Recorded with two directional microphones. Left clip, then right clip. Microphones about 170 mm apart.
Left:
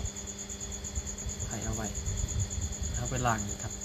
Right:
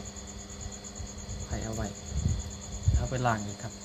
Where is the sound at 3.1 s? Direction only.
25° right (ahead or behind).